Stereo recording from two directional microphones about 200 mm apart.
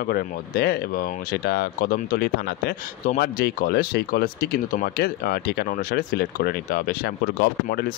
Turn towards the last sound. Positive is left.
turn(degrees=50)  # may be behind; listen again after turning